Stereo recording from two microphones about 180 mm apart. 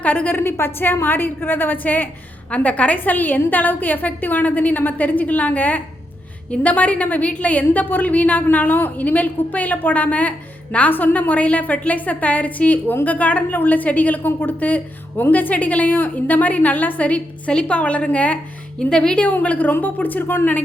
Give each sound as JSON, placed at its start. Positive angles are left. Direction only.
{"t": 0.0, "sound": "a woman's voice", "side_deg": 10}